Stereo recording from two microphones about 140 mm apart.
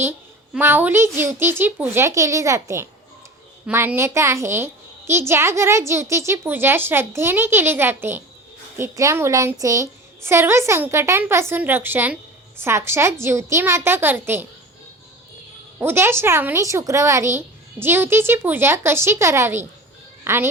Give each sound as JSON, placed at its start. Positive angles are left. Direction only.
{"t": 0.5, "sound": "a woman's voice", "side_deg": -15}
{"t": 15.8, "sound": "a woman's voice", "side_deg": -15}